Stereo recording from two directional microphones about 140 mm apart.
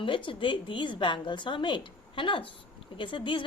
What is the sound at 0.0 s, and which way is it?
A woman's voice, 35° left (ahead or behind).